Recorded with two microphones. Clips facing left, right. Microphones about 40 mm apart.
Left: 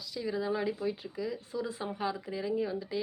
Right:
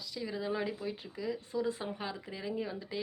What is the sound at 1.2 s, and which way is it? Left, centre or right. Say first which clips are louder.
Speech: right 1 dB; right.